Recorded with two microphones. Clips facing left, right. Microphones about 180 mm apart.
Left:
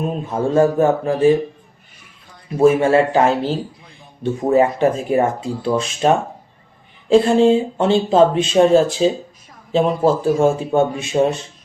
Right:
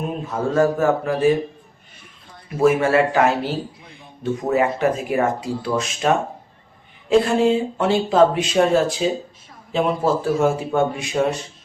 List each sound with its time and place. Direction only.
0.3 s speech: 30° left (ahead or behind)
2.6 s speech: 30° left (ahead or behind)